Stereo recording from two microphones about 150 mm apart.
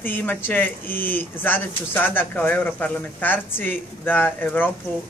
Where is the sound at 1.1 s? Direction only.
15° left (ahead or behind).